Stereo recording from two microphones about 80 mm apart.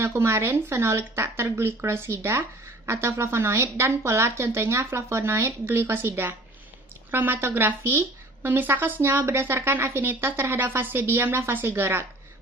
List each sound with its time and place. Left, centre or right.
0.0 s a woman's voice: right